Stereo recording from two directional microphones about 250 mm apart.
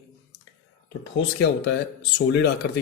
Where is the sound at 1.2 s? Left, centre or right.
Left.